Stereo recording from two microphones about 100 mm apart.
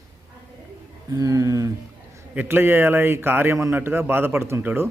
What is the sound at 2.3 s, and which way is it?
A man's voice, 20° right (ahead or behind).